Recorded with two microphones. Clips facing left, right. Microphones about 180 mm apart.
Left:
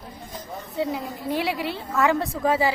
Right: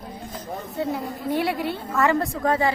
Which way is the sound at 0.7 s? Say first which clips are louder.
Left 1 dB; centre (ahead or behind).